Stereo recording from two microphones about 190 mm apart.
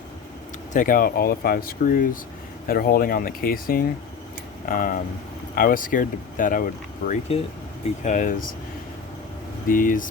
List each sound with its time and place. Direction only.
0.7 s speech: 45° left (ahead or behind)
7.1 s speech: 30° left (ahead or behind)
9.6 s speech: 45° left (ahead or behind)